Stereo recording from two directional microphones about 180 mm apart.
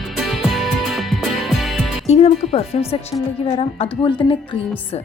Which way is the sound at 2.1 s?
35° left (ahead or behind).